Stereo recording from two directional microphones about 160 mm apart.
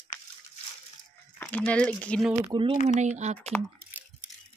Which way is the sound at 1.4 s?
10° left (ahead or behind).